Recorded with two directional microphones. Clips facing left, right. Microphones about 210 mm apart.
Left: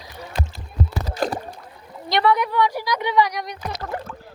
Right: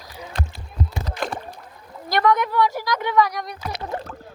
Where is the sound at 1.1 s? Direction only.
40° left (ahead or behind).